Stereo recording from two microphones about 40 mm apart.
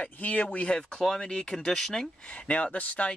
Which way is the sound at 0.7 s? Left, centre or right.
Left.